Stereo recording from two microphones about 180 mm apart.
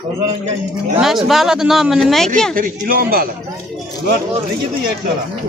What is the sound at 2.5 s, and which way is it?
Speech, 50° right (ahead or behind).